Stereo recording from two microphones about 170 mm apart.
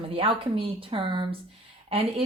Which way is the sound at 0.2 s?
30° right (ahead or behind).